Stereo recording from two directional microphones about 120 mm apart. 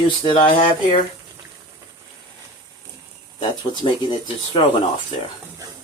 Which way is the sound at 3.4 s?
45° left (ahead or behind).